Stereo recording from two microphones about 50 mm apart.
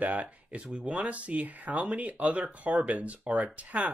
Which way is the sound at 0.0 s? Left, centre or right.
Right.